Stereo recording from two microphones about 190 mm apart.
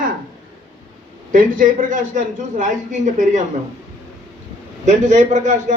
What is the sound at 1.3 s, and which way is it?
A man's voice, 45° right (ahead or behind).